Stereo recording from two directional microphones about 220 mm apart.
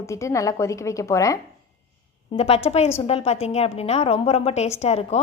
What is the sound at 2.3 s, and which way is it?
A woman's voice, 25° left (ahead or behind).